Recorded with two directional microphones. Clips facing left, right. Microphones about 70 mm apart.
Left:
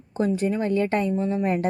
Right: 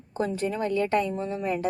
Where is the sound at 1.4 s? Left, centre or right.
Left.